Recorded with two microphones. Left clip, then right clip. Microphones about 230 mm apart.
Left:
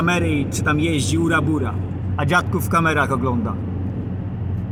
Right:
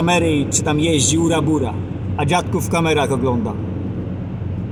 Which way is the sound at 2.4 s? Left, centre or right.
Left.